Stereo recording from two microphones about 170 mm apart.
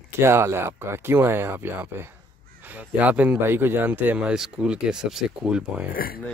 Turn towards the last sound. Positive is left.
turn(degrees=60)  # may be behind; listen again after turning